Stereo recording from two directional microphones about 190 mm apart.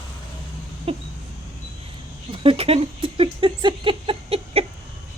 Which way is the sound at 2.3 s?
25° right (ahead or behind).